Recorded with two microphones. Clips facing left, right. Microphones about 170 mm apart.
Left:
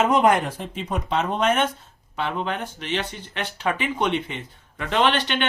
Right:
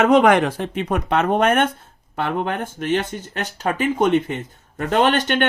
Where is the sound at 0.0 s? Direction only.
85° right.